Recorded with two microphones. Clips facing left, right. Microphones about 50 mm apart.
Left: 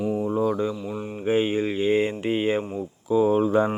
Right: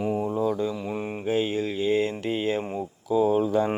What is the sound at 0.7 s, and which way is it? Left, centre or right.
Mantra, right.